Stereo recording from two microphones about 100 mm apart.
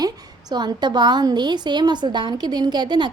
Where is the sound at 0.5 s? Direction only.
45° right (ahead or behind).